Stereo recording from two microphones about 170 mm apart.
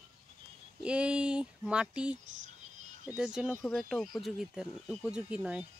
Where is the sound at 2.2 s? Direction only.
45° right (ahead or behind).